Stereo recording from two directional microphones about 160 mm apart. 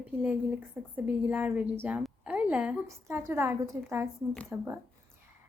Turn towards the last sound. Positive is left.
turn(degrees=-10)  # may be behind; listen again after turning